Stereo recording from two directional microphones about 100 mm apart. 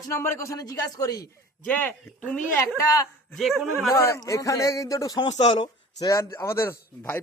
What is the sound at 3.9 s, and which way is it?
A man's voice, 30° left (ahead or behind).